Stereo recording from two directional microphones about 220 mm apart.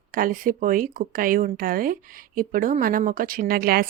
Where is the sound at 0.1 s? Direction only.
40° right (ahead or behind).